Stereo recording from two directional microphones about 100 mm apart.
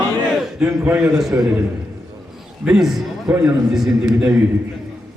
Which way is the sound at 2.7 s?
5° right (ahead or behind).